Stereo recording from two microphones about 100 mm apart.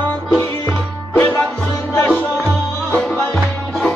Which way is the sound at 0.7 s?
15° left (ahead or behind).